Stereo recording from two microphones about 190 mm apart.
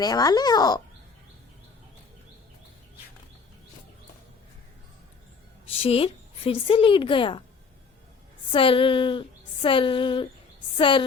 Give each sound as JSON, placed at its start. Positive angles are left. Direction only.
{"t": 0.0, "sound": "speech", "side_deg": 20}
{"t": 5.8, "sound": "speech", "side_deg": 30}
{"t": 8.5, "sound": "a woman's voice", "side_deg": 30}